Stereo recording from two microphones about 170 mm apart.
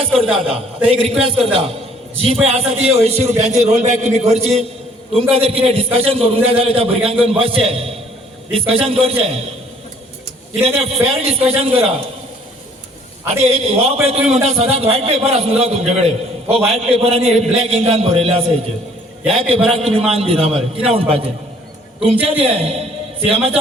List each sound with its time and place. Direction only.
0.2 s a man's voice: 35° right (ahead or behind)
10.6 s a man's voice: 35° right (ahead or behind)
13.4 s a man's voice: 35° right (ahead or behind)